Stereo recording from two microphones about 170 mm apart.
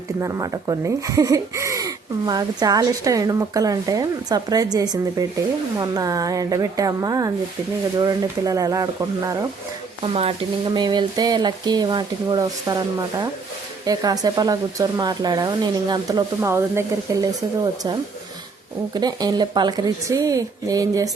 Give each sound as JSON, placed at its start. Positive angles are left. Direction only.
{"t": 0.2, "sound": "speech", "side_deg": -15}
{"t": 10.0, "sound": "speech", "side_deg": -35}
{"t": 18.9, "sound": "speech", "side_deg": -25}